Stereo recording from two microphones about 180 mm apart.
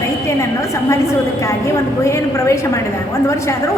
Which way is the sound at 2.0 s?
15° left (ahead or behind).